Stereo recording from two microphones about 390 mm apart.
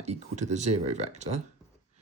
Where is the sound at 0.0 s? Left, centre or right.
Centre.